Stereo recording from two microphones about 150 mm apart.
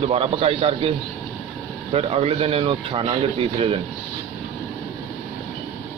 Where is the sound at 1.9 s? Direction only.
40° right (ahead or behind).